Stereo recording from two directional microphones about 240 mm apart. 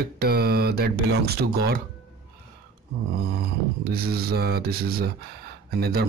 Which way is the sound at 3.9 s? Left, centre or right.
Right.